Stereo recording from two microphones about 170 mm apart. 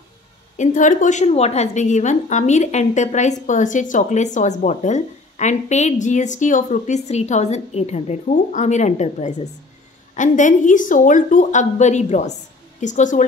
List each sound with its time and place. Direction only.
0.6 s a woman's voice: 50° left (ahead or behind)